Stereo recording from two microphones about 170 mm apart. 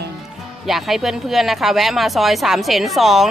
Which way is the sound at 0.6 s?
Centre (ahead or behind).